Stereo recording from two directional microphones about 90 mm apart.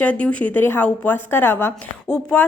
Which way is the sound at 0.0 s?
15° left (ahead or behind).